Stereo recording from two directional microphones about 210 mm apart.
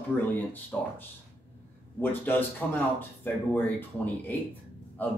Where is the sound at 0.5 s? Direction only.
10° left (ahead or behind).